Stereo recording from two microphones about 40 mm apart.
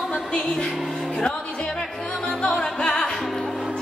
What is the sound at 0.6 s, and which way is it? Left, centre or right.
Music, centre.